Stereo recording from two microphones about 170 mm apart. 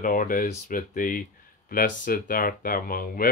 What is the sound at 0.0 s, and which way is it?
Speech, 55° left (ahead or behind).